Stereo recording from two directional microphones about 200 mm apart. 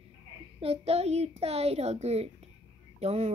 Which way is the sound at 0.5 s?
30° right (ahead or behind).